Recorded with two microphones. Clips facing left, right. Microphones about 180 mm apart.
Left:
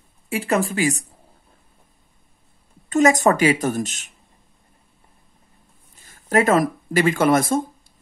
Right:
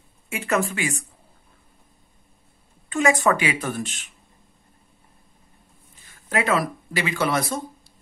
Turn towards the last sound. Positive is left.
turn(degrees=50)  # may be behind; listen again after turning